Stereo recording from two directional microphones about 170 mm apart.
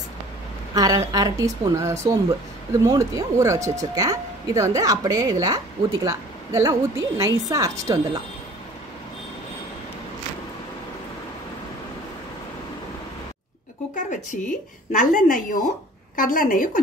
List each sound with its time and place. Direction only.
0.7 s speech: 20° right (ahead or behind)
13.9 s a woman's voice: 45° left (ahead or behind)